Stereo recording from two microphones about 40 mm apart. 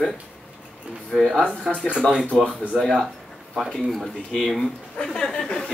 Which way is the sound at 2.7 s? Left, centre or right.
Centre.